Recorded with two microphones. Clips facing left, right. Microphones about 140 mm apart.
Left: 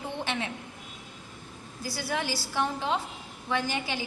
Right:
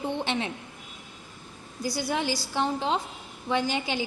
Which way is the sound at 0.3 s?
25° right (ahead or behind).